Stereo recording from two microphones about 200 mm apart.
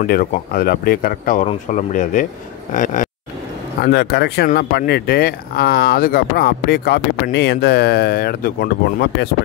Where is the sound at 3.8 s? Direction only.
55° left (ahead or behind).